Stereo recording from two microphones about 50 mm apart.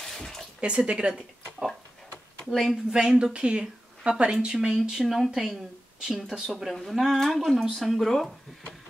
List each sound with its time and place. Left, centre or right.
0.0 s a sound: centre
0.6 s speech: centre
2.5 s speech: centre
5.0 s speech: centre
6.3 s speech: centre
6.6 s speech: centre